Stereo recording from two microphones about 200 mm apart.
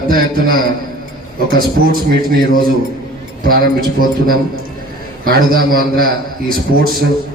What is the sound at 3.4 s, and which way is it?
A man's voice, 45° right (ahead or behind).